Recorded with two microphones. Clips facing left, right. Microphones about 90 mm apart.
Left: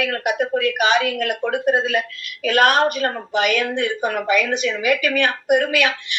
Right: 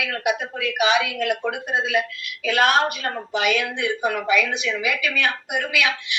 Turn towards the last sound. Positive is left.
turn(degrees=50)  # may be behind; listen again after turning